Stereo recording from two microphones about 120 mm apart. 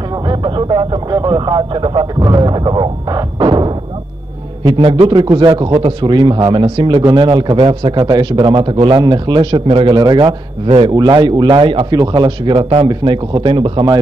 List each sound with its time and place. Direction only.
0.3 s a man's voice: 40° right (ahead or behind)
5.1 s a man's voice: 40° right (ahead or behind)
9.9 s a man's voice: 35° right (ahead or behind)
10.9 s speech: 35° right (ahead or behind)
11.9 s speech: 35° right (ahead or behind)